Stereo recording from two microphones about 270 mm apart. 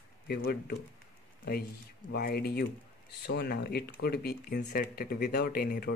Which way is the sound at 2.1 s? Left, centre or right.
Left.